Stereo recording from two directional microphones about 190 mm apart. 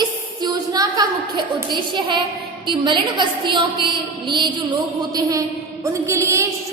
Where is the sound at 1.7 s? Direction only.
25° right (ahead or behind).